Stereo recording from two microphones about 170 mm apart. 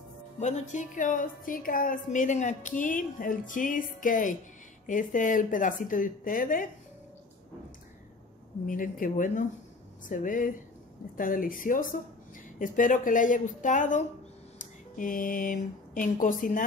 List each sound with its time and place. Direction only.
0.4 s a woman's voice: 45° left (ahead or behind)
8.6 s a woman's voice: 55° left (ahead or behind)